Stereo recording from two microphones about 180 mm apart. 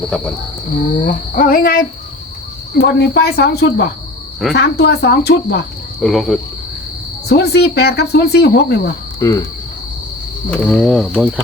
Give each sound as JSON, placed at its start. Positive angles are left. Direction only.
{"t": 1.0, "sound": "female singing", "side_deg": 50}
{"t": 2.7, "sound": "speech", "side_deg": 65}
{"t": 6.0, "sound": "speech", "side_deg": 0}
{"t": 7.3, "sound": "speech", "side_deg": 65}
{"t": 9.2, "sound": "cricket", "side_deg": 20}
{"t": 10.5, "sound": "speech", "side_deg": 0}